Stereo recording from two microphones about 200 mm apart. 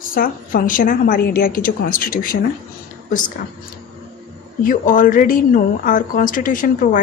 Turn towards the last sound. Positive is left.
turn(degrees=40)  # may be behind; listen again after turning